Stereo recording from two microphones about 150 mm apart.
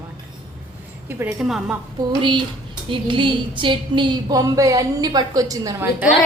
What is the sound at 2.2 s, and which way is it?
A woman's voice, 30° right (ahead or behind).